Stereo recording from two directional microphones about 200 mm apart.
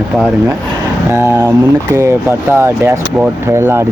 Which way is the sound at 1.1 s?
15° right (ahead or behind).